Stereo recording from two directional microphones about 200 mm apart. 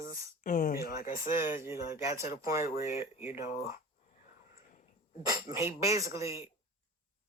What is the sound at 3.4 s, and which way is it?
Speech, 40° left (ahead or behind).